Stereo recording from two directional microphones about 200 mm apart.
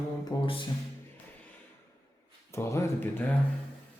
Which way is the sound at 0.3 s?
20° left (ahead or behind).